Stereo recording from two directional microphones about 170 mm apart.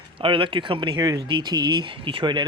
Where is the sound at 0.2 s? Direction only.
30° right (ahead or behind).